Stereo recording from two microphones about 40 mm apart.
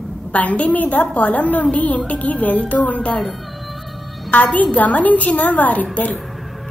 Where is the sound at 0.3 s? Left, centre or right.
Left.